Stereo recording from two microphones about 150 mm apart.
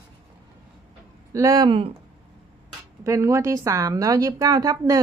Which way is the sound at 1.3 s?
20° right (ahead or behind).